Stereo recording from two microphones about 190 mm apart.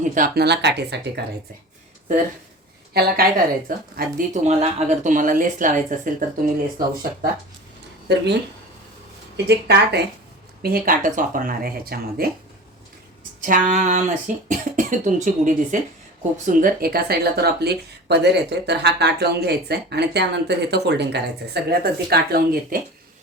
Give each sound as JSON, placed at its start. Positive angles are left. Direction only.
{"t": 0.0, "sound": "speech", "side_deg": -45}
{"t": 2.9, "sound": "speech", "side_deg": -50}
{"t": 4.4, "sound": "speech", "side_deg": -35}
{"t": 8.0, "sound": "speech", "side_deg": -60}
{"t": 9.5, "sound": "speech", "side_deg": -60}
{"t": 10.6, "sound": "speech", "side_deg": -50}
{"t": 13.4, "sound": "speech", "side_deg": -45}